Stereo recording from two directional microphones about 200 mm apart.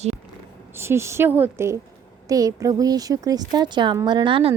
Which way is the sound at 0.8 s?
15° right (ahead or behind).